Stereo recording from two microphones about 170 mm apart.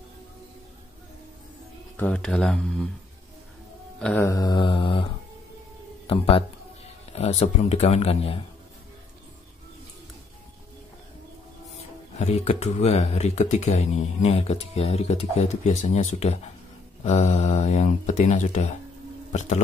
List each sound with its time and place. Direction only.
2.0 s speech: 10° left (ahead or behind)
4.0 s mantra: 15° left (ahead or behind); by 5.1 s 30° left (ahead or behind)
6.0 s speech: 35° left (ahead or behind)
12.2 s speech: 40° left (ahead or behind)